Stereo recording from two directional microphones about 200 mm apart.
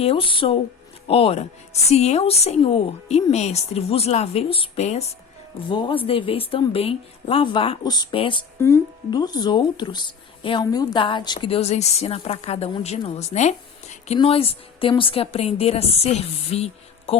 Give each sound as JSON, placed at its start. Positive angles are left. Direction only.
{"t": 0.0, "sound": "a woman's voice", "side_deg": 25}